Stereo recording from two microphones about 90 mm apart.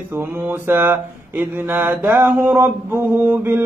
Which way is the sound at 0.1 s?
25° right (ahead or behind).